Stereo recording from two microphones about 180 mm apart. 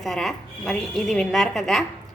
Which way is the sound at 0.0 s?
Centre (ahead or behind).